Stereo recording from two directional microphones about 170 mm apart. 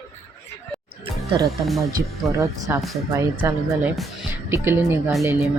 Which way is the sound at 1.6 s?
Centre (ahead or behind).